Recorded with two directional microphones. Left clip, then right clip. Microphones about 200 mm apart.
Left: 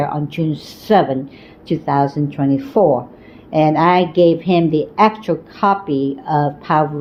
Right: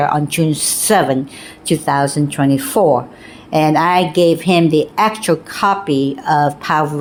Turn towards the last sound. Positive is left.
turn(degrees=-45)  # may be behind; listen again after turning